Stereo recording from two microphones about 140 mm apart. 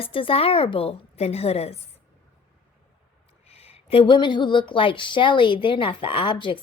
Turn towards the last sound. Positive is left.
turn(degrees=35)  # may be behind; listen again after turning